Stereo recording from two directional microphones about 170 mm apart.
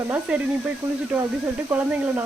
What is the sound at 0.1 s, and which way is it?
Speech, 10° right (ahead or behind).